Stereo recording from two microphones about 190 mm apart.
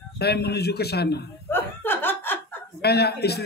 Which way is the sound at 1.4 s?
10° left (ahead or behind).